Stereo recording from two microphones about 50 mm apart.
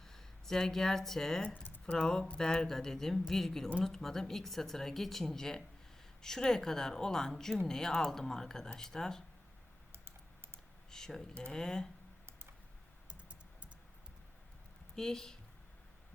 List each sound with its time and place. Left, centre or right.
0.0 s speech: centre
10.9 s speech: centre
13.1 s computer keyboard: right
14.9 s speech: centre